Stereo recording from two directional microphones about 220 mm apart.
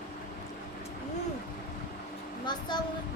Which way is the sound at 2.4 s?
20° left (ahead or behind).